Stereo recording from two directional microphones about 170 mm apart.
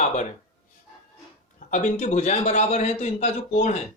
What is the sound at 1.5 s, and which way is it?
A man's voice, 45° left (ahead or behind).